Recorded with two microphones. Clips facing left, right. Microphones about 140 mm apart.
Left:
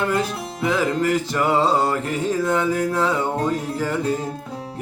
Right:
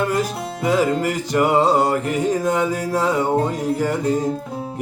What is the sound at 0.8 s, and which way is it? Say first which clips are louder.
Music: right 1 dB; 15° right (ahead or behind).